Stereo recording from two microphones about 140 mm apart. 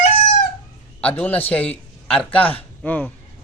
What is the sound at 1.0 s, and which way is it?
A man's voice, 10° left (ahead or behind).